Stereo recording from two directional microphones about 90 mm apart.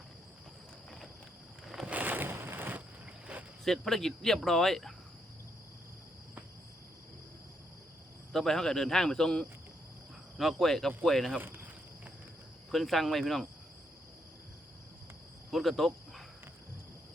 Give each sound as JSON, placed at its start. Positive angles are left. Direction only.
{"t": 1.6, "sound": "boat", "side_deg": -5}
{"t": 1.9, "sound": "a sound", "side_deg": -20}
{"t": 3.6, "sound": "speech", "side_deg": 5}
{"t": 8.3, "sound": "speech", "side_deg": 5}
{"t": 11.3, "sound": "a sound", "side_deg": -25}
{"t": 12.7, "sound": "speech", "side_deg": 0}
{"t": 15.4, "sound": "cricket", "side_deg": 0}